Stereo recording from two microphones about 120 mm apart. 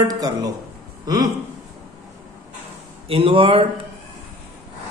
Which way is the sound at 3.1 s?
50° right (ahead or behind).